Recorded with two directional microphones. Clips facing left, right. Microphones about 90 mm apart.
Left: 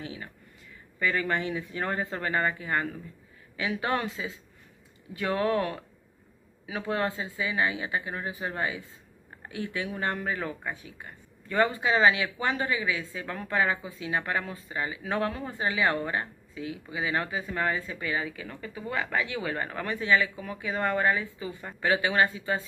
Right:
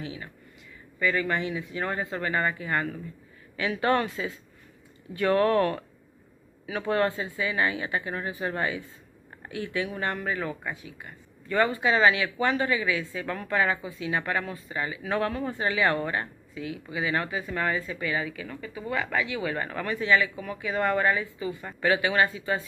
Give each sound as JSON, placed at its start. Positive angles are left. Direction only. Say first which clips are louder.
{"t": 0.0, "sound": "speech", "louder": "right 2 dB", "side_deg": 30}